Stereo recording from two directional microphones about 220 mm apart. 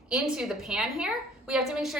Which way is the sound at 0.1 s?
Centre (ahead or behind).